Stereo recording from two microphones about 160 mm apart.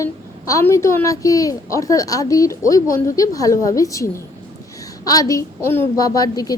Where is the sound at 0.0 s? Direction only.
20° left (ahead or behind).